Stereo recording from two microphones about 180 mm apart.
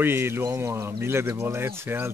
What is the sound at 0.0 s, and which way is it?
Speech, 15° right (ahead or behind).